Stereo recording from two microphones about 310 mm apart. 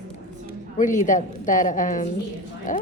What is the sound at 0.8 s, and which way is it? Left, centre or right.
Speech, left.